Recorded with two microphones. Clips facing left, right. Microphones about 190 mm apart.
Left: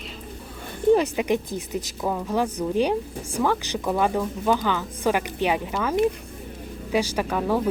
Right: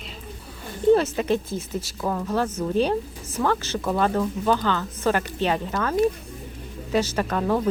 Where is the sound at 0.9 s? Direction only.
15° left (ahead or behind).